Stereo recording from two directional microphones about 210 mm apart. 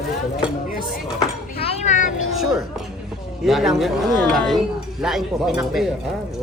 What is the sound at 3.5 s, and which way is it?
Speech, centre (ahead or behind).